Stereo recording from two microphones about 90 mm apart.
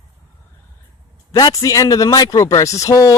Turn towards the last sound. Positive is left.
turn(degrees=40)  # may be behind; listen again after turning